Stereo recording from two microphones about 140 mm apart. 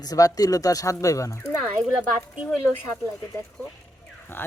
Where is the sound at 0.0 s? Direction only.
25° left (ahead or behind).